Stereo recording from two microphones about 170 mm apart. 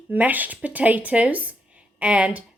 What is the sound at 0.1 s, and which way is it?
Speech, 10° right (ahead or behind).